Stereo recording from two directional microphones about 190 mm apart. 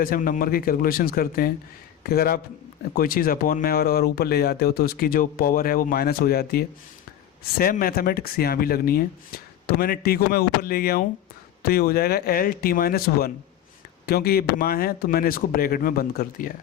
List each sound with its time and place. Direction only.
0.0 s speech: 50° left (ahead or behind)